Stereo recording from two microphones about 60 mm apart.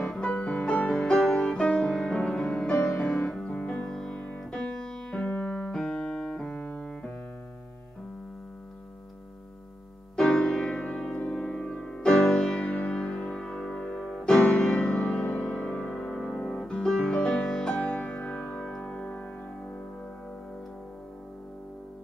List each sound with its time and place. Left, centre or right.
0.1 s music: centre
5.2 s keyboard: left
6.5 s piano: left
10.1 s music: centre
12.1 s music: centre
12.4 s music: centre
17.7 s music: centre